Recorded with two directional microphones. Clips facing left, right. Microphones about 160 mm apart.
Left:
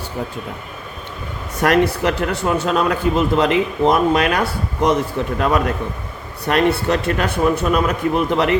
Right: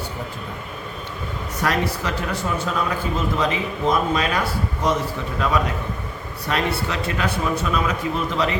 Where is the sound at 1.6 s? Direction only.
65° left (ahead or behind).